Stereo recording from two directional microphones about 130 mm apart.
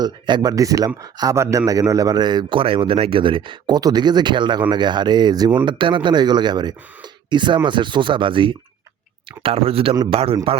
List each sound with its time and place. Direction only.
0.0 s a man's voice: 35° right (ahead or behind)